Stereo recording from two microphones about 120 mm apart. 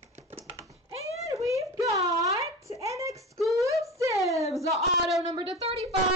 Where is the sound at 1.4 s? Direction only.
25° right (ahead or behind).